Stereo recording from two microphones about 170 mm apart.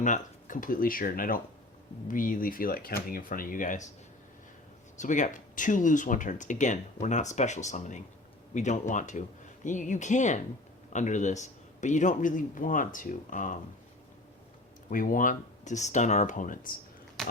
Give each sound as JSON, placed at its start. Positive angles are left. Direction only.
{"t": 0.0, "sound": "speech", "side_deg": 50}
{"t": 4.9, "sound": "speech", "side_deg": 45}
{"t": 14.8, "sound": "speech", "side_deg": 55}
{"t": 17.2, "sound": "a sound", "side_deg": 0}